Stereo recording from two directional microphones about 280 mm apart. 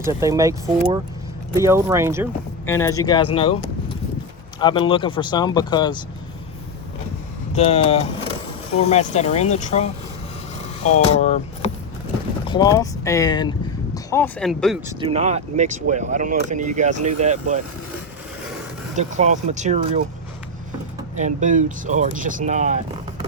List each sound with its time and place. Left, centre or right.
0.0 s speech: centre
2.6 s speech: centre
3.3 s a sound: centre
4.6 s speech: centre
7.5 s speech: left
12.5 s speech: centre
15.0 s speech: right
18.9 s speech: right
21.2 s speech: right